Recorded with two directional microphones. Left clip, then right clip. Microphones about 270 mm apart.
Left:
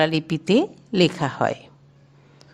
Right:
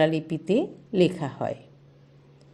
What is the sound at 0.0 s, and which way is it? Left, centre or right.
A woman's voice, left.